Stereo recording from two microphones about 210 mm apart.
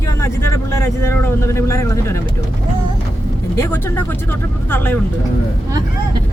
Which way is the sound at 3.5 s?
10° left (ahead or behind).